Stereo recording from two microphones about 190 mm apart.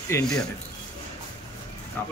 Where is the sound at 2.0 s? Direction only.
10° left (ahead or behind).